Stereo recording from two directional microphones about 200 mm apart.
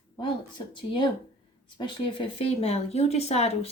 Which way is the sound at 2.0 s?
25° left (ahead or behind).